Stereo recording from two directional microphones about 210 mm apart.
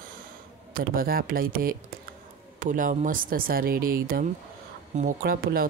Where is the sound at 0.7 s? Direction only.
45° right (ahead or behind).